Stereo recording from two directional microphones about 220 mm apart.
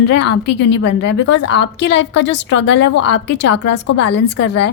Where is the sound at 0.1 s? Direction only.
50° left (ahead or behind).